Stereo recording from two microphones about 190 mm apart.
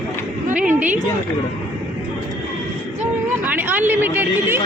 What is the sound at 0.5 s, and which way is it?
Speech, 5° right (ahead or behind).